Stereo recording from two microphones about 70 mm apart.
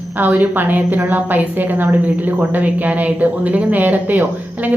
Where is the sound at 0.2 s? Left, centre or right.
Right.